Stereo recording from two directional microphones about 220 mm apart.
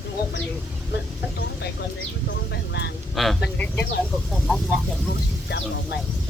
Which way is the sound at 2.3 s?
55° left (ahead or behind).